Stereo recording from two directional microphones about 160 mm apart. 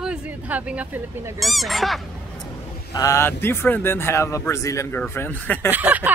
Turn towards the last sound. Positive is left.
turn(degrees=-10)  # may be behind; listen again after turning